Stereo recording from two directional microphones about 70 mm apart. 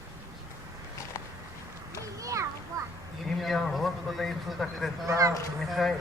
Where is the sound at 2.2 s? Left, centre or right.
Right.